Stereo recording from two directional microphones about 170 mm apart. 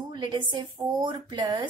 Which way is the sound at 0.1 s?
30° right (ahead or behind).